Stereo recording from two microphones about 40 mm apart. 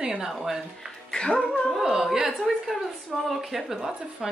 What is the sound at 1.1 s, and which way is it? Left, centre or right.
Music, left.